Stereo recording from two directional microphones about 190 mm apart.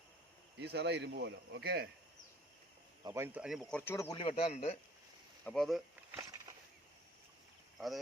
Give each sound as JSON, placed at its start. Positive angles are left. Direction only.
{"t": 0.6, "sound": "speech", "side_deg": -60}
{"t": 3.0, "sound": "speech", "side_deg": -15}
{"t": 3.4, "sound": "speech", "side_deg": 0}
{"t": 4.2, "sound": "a man's voice", "side_deg": 30}
{"t": 5.5, "sound": "speech", "side_deg": 0}
{"t": 6.1, "sound": "a sound", "side_deg": -20}